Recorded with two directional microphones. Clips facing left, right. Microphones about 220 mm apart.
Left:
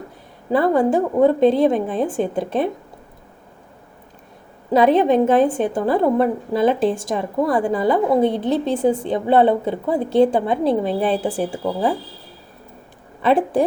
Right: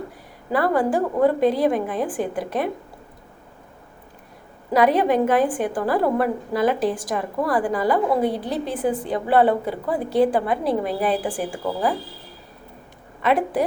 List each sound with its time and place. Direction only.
0.5 s a woman's voice: 25° left (ahead or behind)
4.7 s a woman's voice: 25° left (ahead or behind)
13.2 s a woman's voice: 30° left (ahead or behind)